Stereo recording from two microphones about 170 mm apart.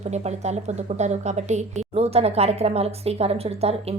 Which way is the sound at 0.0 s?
40° right (ahead or behind).